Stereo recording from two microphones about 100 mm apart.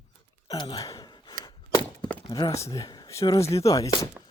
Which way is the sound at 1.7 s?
20° left (ahead or behind).